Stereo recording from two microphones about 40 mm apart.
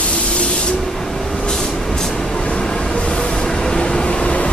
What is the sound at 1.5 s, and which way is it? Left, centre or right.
Vehicle, centre.